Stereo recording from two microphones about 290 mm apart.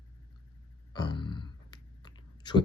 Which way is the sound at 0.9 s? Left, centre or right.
Centre.